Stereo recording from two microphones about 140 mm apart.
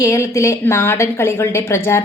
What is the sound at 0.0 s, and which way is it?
A woman's voice, 20° left (ahead or behind).